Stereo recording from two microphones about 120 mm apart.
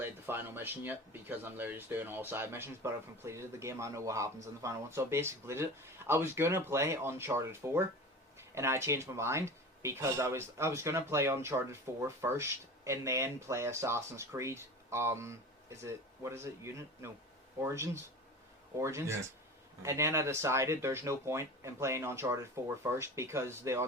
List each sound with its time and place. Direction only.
0.0 s speech: 15° right (ahead or behind)